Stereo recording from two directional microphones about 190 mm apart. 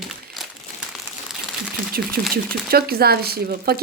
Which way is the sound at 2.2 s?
50° right (ahead or behind).